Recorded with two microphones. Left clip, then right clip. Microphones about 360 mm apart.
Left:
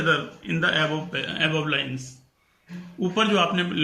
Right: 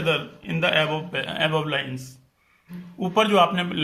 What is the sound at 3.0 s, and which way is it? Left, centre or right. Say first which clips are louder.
Speech: right 3 dB; centre.